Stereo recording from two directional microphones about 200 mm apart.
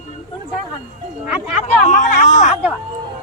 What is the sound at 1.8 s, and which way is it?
Speech, 40° left (ahead or behind).